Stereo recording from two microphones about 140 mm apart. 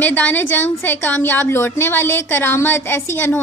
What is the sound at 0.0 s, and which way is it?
A woman's voice, 15° left (ahead or behind).